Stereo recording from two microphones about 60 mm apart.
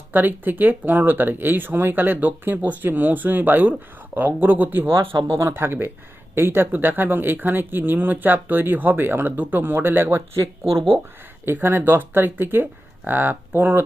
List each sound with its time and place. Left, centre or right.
0.1 s speech: right
11.4 s speech: right